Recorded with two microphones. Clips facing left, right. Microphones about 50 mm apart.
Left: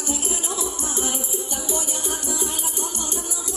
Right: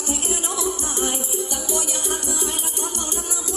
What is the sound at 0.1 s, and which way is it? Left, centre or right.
Music, right.